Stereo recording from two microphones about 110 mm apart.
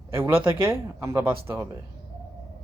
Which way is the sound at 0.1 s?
20° right (ahead or behind).